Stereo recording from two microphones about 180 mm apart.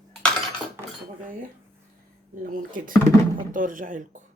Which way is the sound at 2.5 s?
50° right (ahead or behind).